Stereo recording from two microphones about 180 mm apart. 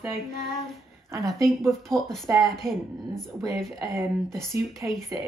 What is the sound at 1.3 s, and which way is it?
Speech, centre (ahead or behind).